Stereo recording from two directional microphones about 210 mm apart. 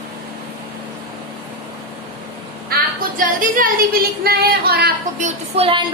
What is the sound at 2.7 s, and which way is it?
Female singing, 40° right (ahead or behind).